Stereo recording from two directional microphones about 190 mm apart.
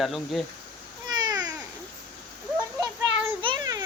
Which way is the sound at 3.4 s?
25° right (ahead or behind).